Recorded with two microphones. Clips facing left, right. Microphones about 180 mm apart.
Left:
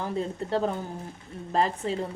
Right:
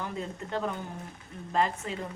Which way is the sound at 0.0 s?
35° left (ahead or behind).